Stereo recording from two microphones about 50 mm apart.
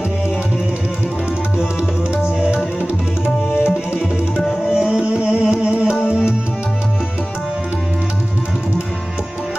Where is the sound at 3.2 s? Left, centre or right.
Left.